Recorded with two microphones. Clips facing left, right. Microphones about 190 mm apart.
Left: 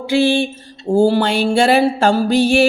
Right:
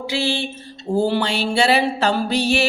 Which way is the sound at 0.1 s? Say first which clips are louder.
Left 10 dB; 50° left (ahead or behind).